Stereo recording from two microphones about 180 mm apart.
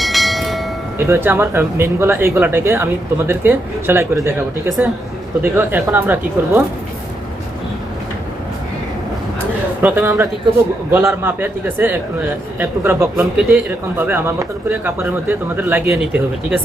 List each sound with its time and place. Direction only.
0.0 s train: centre (ahead or behind)
0.9 s speech: 15° right (ahead or behind)
9.8 s speech: 15° right (ahead or behind)